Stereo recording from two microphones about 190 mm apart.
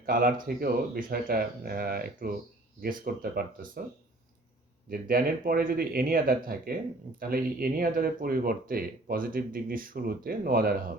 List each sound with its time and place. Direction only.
0.0 s speech: 50° right (ahead or behind)
4.9 s speech: 50° right (ahead or behind)